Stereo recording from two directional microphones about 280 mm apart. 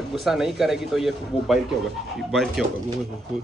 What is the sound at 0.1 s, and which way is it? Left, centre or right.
Speech, centre.